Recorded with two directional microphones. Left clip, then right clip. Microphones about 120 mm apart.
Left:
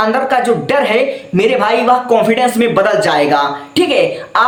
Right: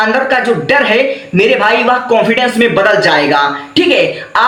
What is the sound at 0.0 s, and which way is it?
A man's voice, 45° left (ahead or behind).